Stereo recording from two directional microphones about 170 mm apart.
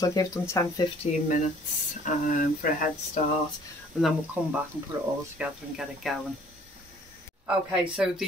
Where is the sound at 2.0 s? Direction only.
50° left (ahead or behind).